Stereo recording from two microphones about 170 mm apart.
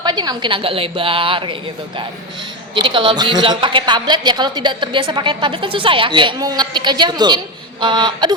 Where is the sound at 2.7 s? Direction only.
30° right (ahead or behind).